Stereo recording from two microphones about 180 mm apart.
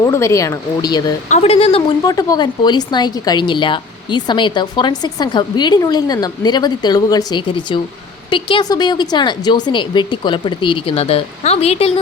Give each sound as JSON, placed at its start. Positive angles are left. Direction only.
{"t": 0.0, "sound": "speech", "side_deg": 15}
{"t": 1.3, "sound": "speech", "side_deg": 35}
{"t": 2.0, "sound": "speech", "side_deg": 20}